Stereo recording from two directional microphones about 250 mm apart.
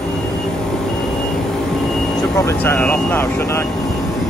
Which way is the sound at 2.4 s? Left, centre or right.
Centre.